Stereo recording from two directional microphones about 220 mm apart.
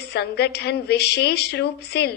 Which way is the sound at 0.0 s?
45° left (ahead or behind).